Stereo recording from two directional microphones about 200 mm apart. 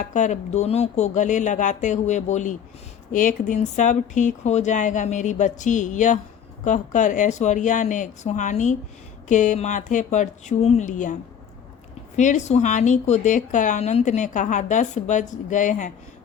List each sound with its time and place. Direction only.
0.0 s speech: 40° left (ahead or behind)